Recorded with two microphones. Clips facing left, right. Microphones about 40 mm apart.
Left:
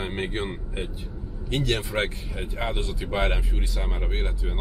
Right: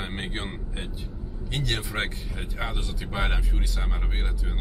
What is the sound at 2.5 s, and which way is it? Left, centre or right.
A man's voice, centre.